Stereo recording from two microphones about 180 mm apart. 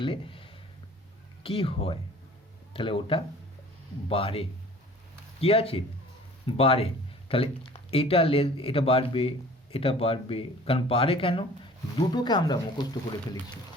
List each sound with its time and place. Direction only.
0.0 s speech: 30° left (ahead or behind)